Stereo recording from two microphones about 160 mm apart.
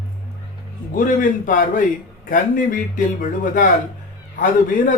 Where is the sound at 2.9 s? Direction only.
55° left (ahead or behind).